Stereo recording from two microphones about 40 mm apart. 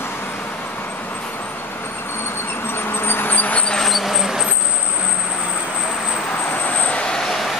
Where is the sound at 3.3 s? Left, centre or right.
Left.